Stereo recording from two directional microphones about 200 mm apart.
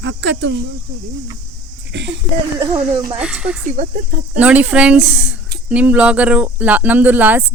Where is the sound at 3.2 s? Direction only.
5° right (ahead or behind).